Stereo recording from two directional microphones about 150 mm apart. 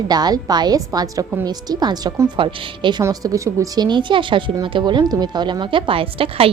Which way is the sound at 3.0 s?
20° right (ahead or behind).